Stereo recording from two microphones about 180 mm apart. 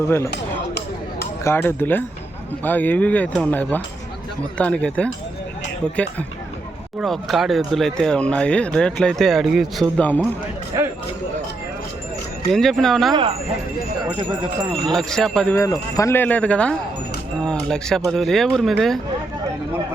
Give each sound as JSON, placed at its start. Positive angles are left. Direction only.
{"t": 1.5, "sound": "speech", "side_deg": 10}
{"t": 7.0, "sound": "speech", "side_deg": 0}
{"t": 10.7, "sound": "speech", "side_deg": -20}
{"t": 12.5, "sound": "speech", "side_deg": 0}
{"t": 14.2, "sound": "speech", "side_deg": -25}
{"t": 14.9, "sound": "speech", "side_deg": 0}
{"t": 15.5, "sound": "speech", "side_deg": 20}